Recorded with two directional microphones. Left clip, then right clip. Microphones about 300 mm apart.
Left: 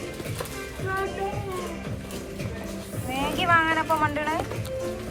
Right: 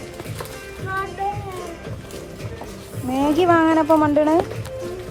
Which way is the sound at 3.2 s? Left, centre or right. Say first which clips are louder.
Right 5 dB; centre.